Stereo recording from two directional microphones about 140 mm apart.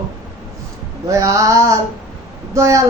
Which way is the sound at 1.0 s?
25° right (ahead or behind).